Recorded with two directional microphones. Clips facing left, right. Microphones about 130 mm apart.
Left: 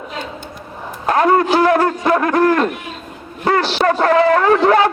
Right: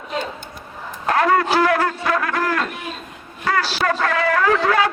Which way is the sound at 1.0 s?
25° left (ahead or behind).